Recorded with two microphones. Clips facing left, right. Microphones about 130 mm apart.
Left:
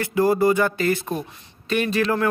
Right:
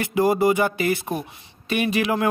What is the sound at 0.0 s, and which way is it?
Speech, 15° right (ahead or behind).